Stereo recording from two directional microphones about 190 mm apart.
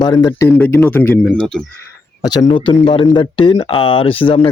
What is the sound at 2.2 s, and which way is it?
Speech, 20° left (ahead or behind).